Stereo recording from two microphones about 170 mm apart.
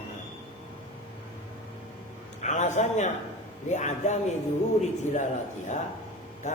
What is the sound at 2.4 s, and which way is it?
A man's voice, 45° left (ahead or behind).